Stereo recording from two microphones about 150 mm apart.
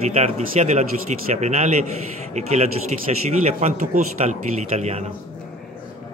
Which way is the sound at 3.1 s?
50° right (ahead or behind).